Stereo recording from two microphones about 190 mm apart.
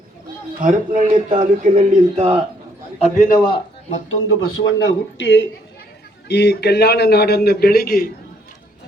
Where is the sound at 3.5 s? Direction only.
85° left.